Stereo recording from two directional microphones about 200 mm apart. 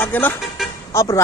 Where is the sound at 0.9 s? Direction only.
15° left (ahead or behind).